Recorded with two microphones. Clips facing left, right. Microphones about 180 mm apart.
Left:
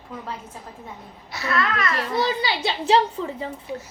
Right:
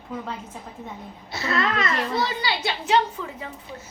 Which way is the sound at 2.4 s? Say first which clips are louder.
Left 2 dB; 30° left (ahead or behind).